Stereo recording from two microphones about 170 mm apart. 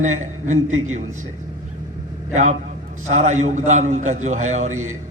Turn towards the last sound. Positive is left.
turn(degrees=-45)  # may be behind; listen again after turning